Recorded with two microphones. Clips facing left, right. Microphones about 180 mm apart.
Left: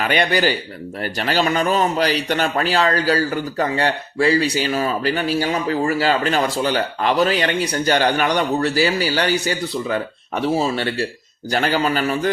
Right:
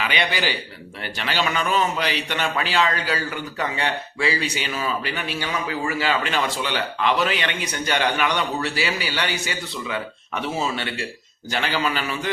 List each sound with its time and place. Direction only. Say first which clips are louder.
0.0 s a man's voice: left 6 dB; 45° left (ahead or behind)